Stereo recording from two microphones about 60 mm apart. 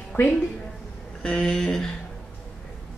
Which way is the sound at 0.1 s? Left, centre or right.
Left.